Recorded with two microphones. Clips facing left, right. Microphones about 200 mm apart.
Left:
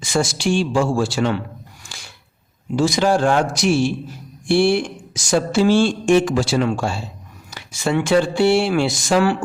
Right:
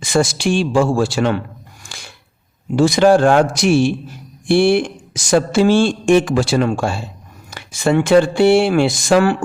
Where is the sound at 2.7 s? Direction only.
60° right (ahead or behind).